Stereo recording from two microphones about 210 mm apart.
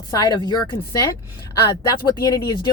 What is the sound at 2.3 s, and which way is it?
Speech, 15° left (ahead or behind).